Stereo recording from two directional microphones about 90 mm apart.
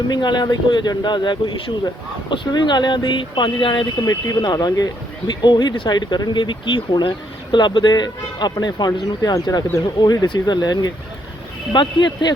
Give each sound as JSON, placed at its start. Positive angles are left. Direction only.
{"t": 0.1, "sound": "speech", "side_deg": 55}
{"t": 4.0, "sound": "speech", "side_deg": 45}